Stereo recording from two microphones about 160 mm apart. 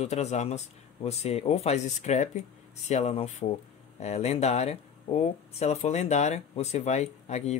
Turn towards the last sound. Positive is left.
turn(degrees=45)  # may be behind; listen again after turning